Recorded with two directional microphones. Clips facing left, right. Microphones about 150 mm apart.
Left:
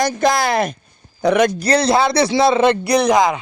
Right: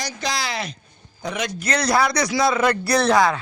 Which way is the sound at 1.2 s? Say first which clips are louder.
Left 13 dB; 65° left (ahead or behind).